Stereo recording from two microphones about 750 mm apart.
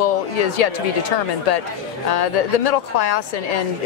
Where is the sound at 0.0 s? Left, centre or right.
Left.